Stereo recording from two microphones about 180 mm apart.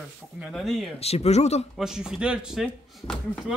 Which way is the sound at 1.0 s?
35° left (ahead or behind).